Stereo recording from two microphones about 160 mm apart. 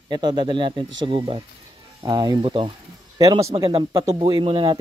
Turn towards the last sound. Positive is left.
turn(degrees=-30)  # may be behind; listen again after turning